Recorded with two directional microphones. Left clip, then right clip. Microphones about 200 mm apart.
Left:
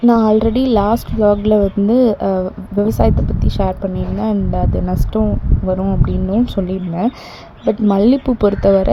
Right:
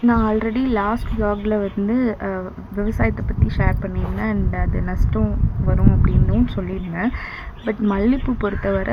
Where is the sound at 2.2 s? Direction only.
30° left (ahead or behind).